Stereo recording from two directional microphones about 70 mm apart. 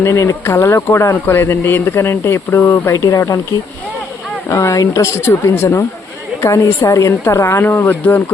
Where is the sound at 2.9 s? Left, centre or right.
Left.